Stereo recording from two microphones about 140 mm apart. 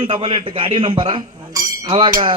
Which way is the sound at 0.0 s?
40° right (ahead or behind).